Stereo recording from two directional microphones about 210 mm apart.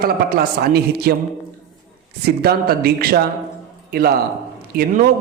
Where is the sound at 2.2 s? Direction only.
50° right (ahead or behind).